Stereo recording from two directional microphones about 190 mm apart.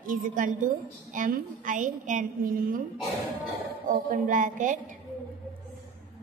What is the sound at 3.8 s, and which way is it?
A woman's voice, 45° right (ahead or behind).